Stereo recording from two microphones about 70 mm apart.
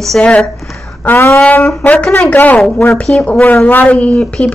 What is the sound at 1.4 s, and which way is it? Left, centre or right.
A woman's voice, left.